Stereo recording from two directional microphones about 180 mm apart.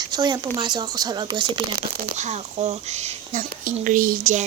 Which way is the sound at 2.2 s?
40° right (ahead or behind).